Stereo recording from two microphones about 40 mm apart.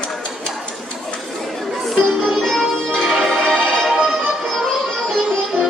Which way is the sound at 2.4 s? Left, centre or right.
Centre.